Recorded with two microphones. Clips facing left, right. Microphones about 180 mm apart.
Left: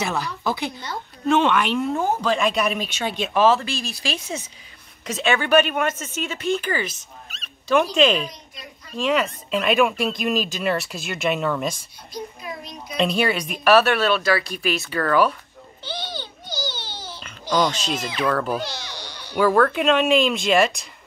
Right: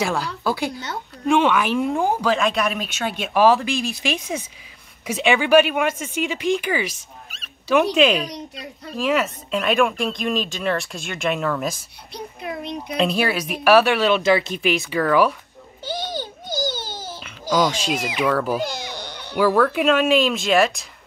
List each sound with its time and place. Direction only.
1.2 s speech: 10° right (ahead or behind)
2.3 s speech: centre (ahead or behind)
8.3 s a woman's voice: 75° right (ahead or behind)
8.9 s speech: 5° right (ahead or behind)
12.1 s a child's voice: 60° right (ahead or behind)
12.9 s speech: centre (ahead or behind)
15.8 s a sound: 45° right (ahead or behind)
17.2 s a child's voice: 5° right (ahead or behind)
18.7 s a sound: 55° right (ahead or behind)
19.3 s speech: 5° right (ahead or behind)